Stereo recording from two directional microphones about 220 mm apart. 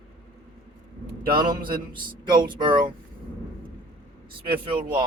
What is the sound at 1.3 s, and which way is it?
Speech, 20° right (ahead or behind).